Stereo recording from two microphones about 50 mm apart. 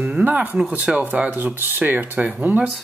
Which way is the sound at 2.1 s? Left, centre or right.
Right.